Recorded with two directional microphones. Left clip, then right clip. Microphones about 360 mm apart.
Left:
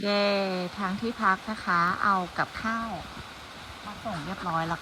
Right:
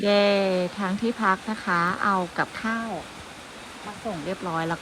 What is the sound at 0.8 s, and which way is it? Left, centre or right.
Speech, right.